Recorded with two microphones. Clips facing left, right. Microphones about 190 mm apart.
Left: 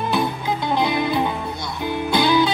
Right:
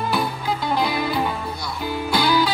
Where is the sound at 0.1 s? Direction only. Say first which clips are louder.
Left 2 dB; 20° left (ahead or behind).